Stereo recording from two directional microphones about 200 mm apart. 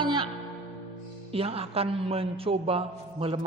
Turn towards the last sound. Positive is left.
turn(degrees=-30)  # may be behind; listen again after turning